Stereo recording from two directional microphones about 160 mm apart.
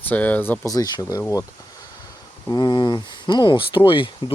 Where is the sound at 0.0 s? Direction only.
10° left (ahead or behind).